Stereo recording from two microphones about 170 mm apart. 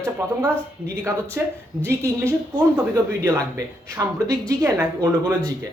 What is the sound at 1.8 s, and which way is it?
Speech, 15° right (ahead or behind).